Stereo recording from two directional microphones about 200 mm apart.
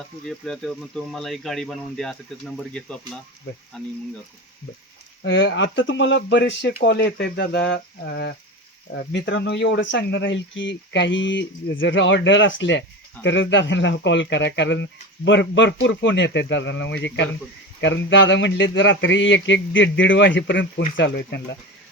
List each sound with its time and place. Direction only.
0.3 s speech: centre (ahead or behind)
5.2 s speech: 65° left (ahead or behind)